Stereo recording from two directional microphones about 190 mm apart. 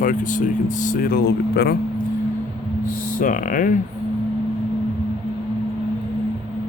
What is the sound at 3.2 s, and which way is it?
Speech, 45° left (ahead or behind).